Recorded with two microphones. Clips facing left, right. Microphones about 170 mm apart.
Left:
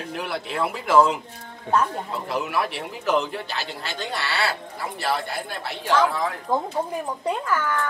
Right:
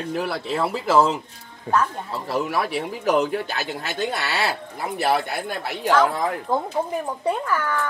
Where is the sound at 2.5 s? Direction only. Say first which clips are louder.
Right 2 dB; 40° right (ahead or behind).